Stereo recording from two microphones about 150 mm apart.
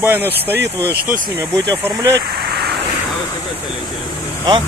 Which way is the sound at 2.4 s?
90° right.